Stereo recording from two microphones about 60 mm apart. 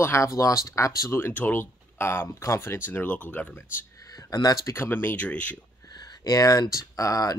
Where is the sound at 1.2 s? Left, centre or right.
Left.